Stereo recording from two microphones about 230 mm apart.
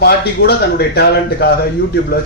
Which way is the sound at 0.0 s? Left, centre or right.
Left.